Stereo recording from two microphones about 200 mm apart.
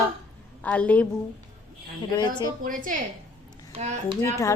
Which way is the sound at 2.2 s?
20° left (ahead or behind).